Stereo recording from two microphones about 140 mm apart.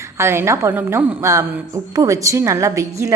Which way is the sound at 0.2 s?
20° right (ahead or behind).